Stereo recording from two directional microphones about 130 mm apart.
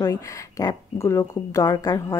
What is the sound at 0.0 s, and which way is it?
Speech, 25° left (ahead or behind).